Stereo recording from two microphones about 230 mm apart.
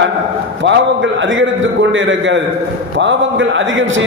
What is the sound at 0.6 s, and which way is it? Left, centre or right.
A man's voice, right.